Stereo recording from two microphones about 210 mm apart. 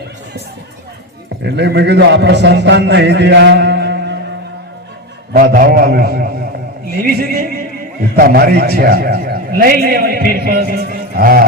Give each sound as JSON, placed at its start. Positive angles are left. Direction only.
{"t": 1.5, "sound": "a man's voice", "side_deg": -55}
{"t": 5.3, "sound": "a man's voice", "side_deg": -45}